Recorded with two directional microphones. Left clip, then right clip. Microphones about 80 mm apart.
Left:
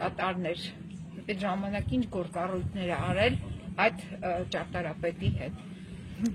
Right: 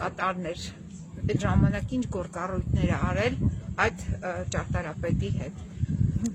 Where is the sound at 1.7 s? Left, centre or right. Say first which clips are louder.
Right 1 dB; right.